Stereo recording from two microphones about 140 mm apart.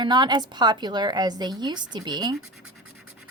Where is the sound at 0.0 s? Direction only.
30° right (ahead or behind).